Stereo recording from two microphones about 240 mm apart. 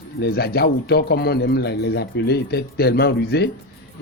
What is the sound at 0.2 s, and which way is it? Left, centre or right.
Speech, left.